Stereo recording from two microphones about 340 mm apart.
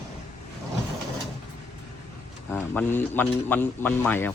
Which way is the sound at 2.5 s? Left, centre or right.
Centre.